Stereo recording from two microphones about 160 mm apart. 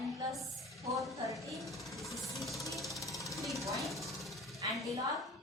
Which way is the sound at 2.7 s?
Centre (ahead or behind).